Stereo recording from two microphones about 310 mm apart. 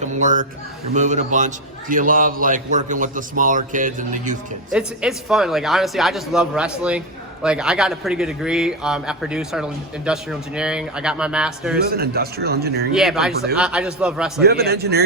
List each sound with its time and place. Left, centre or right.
0.0 s chuckle: right
0.9 s a man's voice: right
4.7 s speech: centre
11.8 s speech: right
12.9 s speech: centre
14.4 s speech: right